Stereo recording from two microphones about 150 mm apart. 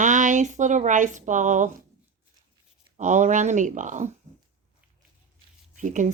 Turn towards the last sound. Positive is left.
turn(degrees=-55)  # may be behind; listen again after turning